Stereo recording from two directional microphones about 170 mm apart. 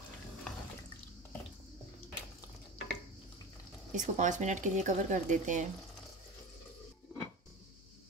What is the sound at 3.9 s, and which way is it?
Speech, 45° right (ahead or behind).